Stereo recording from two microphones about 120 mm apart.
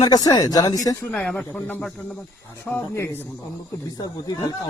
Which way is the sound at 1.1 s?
10° left (ahead or behind).